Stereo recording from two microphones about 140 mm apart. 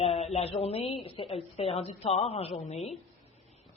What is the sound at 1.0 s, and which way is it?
A woman's voice, 45° left (ahead or behind).